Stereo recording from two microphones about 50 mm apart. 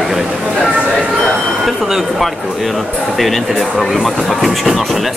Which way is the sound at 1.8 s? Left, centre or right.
Centre.